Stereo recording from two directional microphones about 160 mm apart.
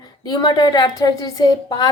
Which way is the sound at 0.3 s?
25° left (ahead or behind).